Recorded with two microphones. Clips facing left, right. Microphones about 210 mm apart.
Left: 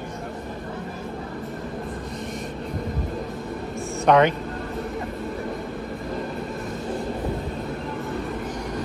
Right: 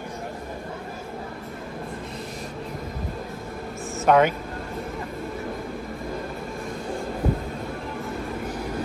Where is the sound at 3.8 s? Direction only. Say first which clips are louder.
Left 1 dB; 5° right (ahead or behind).